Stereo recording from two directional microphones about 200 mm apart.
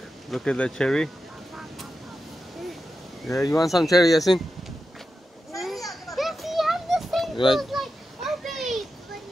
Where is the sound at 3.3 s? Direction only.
15° left (ahead or behind).